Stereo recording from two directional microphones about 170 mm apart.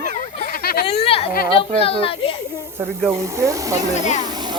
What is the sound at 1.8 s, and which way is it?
Speech, 35° left (ahead or behind).